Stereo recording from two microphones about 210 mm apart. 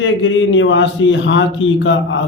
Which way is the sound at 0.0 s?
65° left (ahead or behind).